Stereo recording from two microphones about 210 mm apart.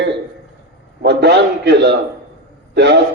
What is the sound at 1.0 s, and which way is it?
A man's voice, 55° right (ahead or behind).